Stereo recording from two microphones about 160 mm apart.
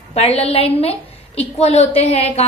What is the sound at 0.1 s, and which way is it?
A woman's voice, 40° left (ahead or behind).